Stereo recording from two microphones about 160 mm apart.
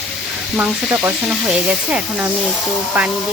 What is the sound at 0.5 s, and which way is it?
Sizzle, 5° right (ahead or behind).